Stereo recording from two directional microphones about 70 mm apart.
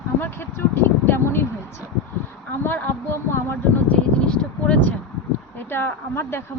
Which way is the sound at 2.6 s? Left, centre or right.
Left.